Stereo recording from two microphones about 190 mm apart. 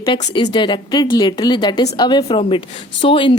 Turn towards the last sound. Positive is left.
turn(degrees=25)  # may be behind; listen again after turning